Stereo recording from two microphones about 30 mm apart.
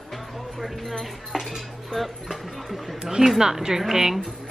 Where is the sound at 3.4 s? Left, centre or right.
Centre.